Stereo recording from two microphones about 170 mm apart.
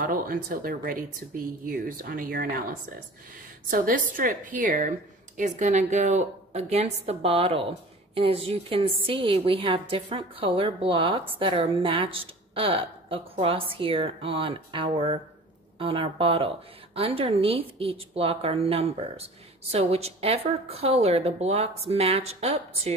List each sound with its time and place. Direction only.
0.0 s speech: 55° right (ahead or behind)
3.7 s a woman's voice: 55° right (ahead or behind); by 22.9 s 35° right (ahead or behind)